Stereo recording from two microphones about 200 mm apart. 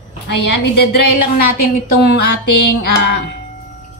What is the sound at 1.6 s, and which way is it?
A woman's voice, 55° left (ahead or behind).